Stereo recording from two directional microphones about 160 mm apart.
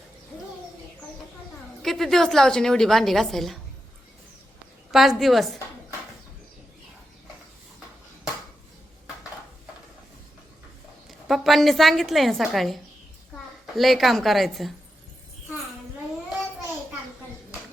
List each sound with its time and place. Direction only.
1.8 s a woman's voice: centre (ahead or behind)
4.9 s a woman's voice: centre (ahead or behind)
11.3 s a woman's voice: centre (ahead or behind)